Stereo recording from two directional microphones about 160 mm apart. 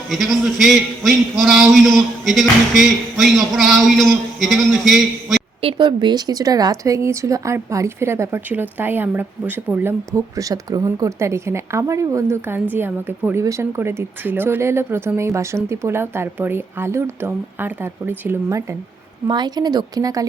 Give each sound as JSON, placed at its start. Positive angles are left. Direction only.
{"t": 0.1, "sound": "a man's voice", "side_deg": 0}
{"t": 5.6, "sound": "a woman's voice", "side_deg": -30}